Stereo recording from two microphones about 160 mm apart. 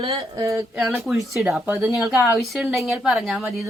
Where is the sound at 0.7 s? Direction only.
5° right (ahead or behind).